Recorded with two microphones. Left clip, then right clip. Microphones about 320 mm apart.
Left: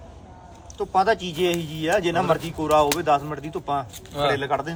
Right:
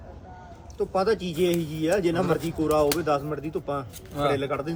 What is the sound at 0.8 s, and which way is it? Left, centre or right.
Speech, centre.